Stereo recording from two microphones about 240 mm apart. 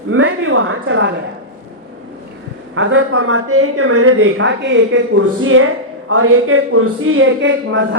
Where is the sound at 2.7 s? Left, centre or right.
Right.